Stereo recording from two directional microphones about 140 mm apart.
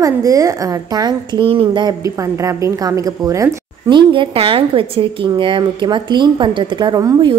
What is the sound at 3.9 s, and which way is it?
A woman's voice, 35° right (ahead or behind).